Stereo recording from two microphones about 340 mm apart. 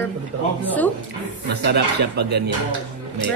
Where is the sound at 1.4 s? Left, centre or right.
Right.